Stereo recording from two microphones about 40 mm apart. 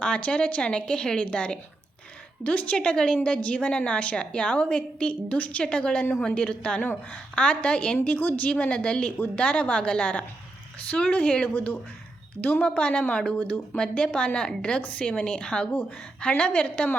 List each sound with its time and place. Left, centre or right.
0.0 s a woman's voice: left
2.4 s a woman's voice: left
2.7 s a woman's voice: centre; by 5.6 s left
5.6 s a woman's voice: left
8.0 s a woman's voice: left
8.4 s a woman's voice: left
11.3 s a woman's voice: left
12.4 s a woman's voice: left
12.6 s a woman's voice: left